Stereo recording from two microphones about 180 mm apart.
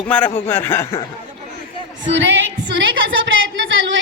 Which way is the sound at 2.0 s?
90° right.